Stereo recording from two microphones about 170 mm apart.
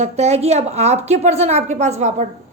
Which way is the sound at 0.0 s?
40° right (ahead or behind).